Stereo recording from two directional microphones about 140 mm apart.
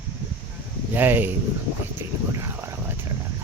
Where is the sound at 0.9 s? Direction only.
15° right (ahead or behind).